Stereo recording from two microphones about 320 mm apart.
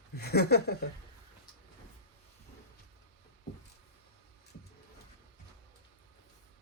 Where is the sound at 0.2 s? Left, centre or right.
Left.